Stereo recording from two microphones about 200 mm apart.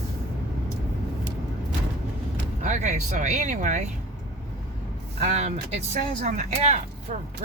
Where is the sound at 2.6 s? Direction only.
35° right (ahead or behind).